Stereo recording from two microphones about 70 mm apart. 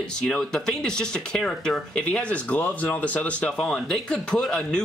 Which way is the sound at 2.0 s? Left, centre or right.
Centre.